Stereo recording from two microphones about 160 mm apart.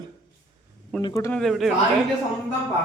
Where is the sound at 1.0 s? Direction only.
20° left (ahead or behind).